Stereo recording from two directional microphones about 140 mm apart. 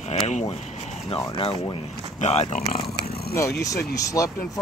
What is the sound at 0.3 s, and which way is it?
Speech, 55° left (ahead or behind).